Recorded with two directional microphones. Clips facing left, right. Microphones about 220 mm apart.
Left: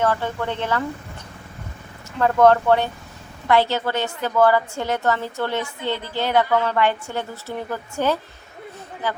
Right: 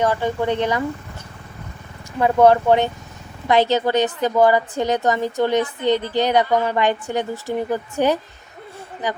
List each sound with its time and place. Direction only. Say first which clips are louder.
0.0 s a woman's voice: right 3 dB; 15° right (ahead or behind)
2.1 s a woman's voice: right 2 dB; 10° right (ahead or behind)